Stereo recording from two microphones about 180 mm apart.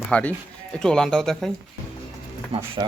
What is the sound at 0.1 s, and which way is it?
Speech, 10° left (ahead or behind).